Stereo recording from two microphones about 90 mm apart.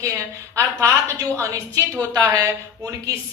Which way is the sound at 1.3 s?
35° right (ahead or behind).